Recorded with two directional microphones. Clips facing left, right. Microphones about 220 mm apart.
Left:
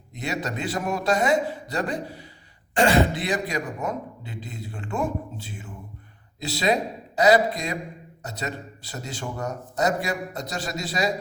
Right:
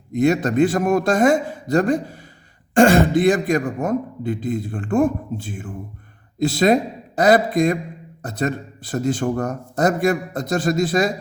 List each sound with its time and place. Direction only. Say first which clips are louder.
0.1 s a man's voice: right 12 dB; 50° right (ahead or behind)